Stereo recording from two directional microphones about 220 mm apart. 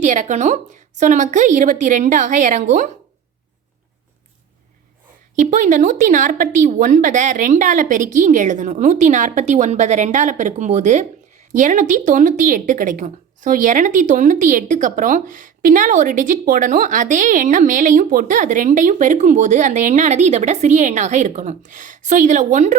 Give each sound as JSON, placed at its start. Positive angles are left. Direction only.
{"t": 0.0, "sound": "speech", "side_deg": -35}
{"t": 5.4, "sound": "speech", "side_deg": -35}